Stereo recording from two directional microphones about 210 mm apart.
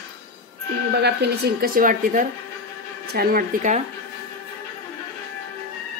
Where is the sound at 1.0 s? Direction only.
50° right (ahead or behind).